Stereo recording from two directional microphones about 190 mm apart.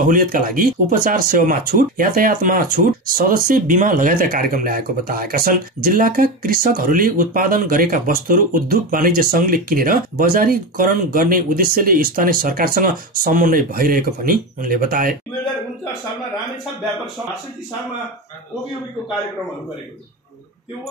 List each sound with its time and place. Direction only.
0.1 s speech: 45° right (ahead or behind)